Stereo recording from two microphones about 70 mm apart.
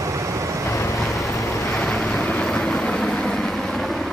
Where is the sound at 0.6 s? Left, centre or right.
Left.